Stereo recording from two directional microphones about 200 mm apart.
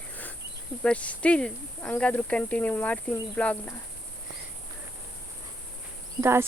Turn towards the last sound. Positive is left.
turn(degrees=-10)  # may be behind; listen again after turning